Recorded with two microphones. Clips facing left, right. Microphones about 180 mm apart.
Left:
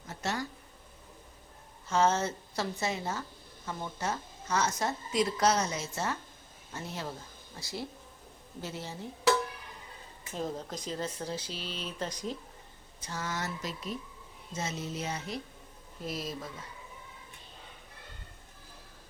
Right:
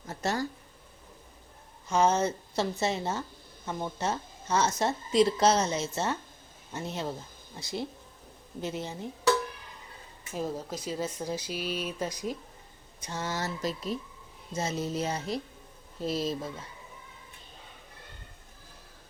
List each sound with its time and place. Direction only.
0.1 s a sound: 40° right (ahead or behind)
1.9 s a woman's voice: 15° right (ahead or behind)
10.3 s speech: 5° right (ahead or behind)
13.0 s a woman's voice: 20° right (ahead or behind)